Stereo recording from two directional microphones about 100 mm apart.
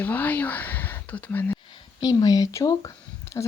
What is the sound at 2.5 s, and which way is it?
Speech, 35° left (ahead or behind).